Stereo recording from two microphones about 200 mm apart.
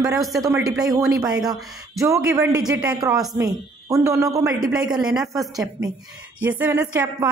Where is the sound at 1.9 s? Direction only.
15° right (ahead or behind).